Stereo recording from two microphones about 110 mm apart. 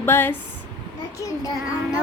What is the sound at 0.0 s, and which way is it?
Speech, 20° left (ahead or behind).